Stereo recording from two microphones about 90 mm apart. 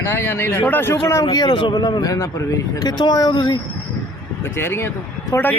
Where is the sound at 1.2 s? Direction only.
50° left (ahead or behind).